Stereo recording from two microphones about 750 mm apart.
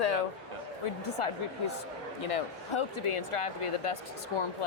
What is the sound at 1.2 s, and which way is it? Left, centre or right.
Speech, left.